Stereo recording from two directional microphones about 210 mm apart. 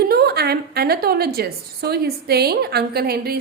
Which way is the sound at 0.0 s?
50° right (ahead or behind).